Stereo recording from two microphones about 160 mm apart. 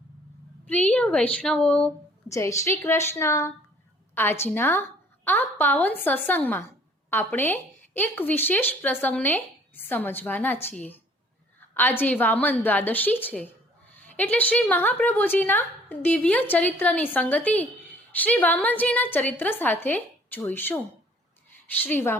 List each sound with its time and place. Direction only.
0.7 s a woman's voice: 10° left (ahead or behind)
2.3 s a woman's voice: 20° left (ahead or behind)
21.8 s a woman's voice: 10° left (ahead or behind)